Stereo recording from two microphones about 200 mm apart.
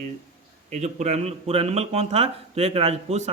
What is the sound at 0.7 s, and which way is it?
Speech, 35° right (ahead or behind).